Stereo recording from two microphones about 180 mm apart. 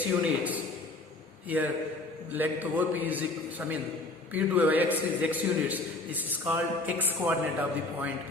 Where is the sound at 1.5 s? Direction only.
10° right (ahead or behind).